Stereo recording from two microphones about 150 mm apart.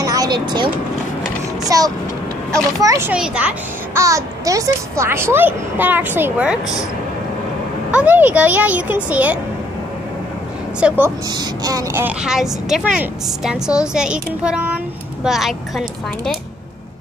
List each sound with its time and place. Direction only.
0.0 s speech: 25° right (ahead or behind)
1.7 s speech: 25° right (ahead or behind)
3.1 s a child's voice: 10° right (ahead or behind)
4.0 s a child's voice: 20° right (ahead or behind)
7.9 s a child's voice: 10° right (ahead or behind)
10.8 s a child's voice: 5° right (ahead or behind)
11.2 s speech: 25° right (ahead or behind)
12.0 s a woman's voice: 10° right (ahead or behind)